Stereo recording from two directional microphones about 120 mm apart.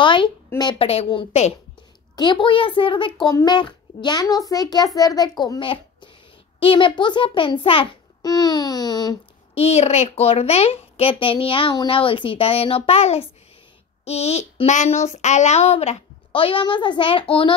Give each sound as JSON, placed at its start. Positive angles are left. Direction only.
{"t": 0.0, "sound": "a sound", "side_deg": 40}
{"t": 0.7, "sound": "speech", "side_deg": 60}
{"t": 2.1, "sound": "a woman's voice", "side_deg": 40}
{"t": 8.2, "sound": "a child's voice", "side_deg": 35}
{"t": 9.6, "sound": "a woman's voice", "side_deg": 60}
{"t": 16.3, "sound": "a woman's voice", "side_deg": 45}